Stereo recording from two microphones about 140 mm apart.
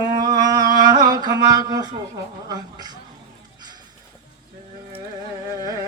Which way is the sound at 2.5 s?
30° right (ahead or behind).